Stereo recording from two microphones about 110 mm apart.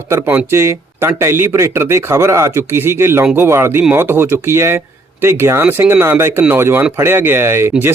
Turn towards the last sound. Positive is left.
turn(degrees=-20)  # may be behind; listen again after turning